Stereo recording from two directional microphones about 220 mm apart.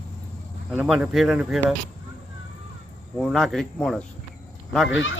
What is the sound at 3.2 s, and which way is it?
Speech, centre (ahead or behind).